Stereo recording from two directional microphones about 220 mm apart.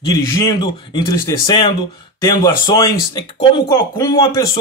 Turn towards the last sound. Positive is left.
turn(degrees=15)  # may be behind; listen again after turning